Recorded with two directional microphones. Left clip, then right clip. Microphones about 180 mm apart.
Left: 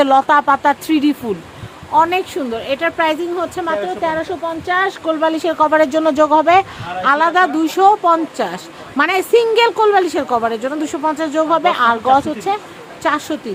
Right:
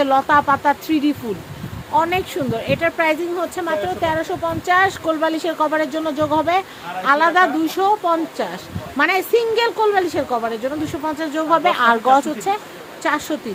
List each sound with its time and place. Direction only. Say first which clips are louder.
0.0 s a woman's voice: left 4 dB; 20° left (ahead or behind)
1.9 s speech: left 4 dB; 10° left (ahead or behind)
5.2 s a woman's voice: left 6 dB; 20° left (ahead or behind); by 12.5 s centre (ahead or behind)
13.0 s speech: left 3 dB; 15° left (ahead or behind)